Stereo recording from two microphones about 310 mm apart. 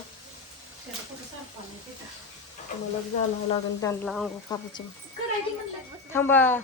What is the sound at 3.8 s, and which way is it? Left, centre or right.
Speech, centre.